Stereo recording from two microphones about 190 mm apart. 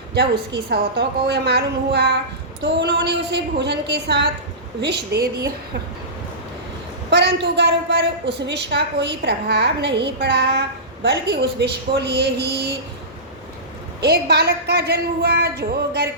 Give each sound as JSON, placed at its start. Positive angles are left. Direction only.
{"t": 0.1, "sound": "a woman's voice", "side_deg": -60}
{"t": 7.1, "sound": "a woman's voice", "side_deg": -65}
{"t": 14.0, "sound": "a woman's voice", "side_deg": -60}